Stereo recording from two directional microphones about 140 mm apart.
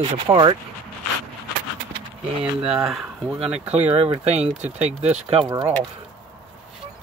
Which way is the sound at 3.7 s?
50° right (ahead or behind).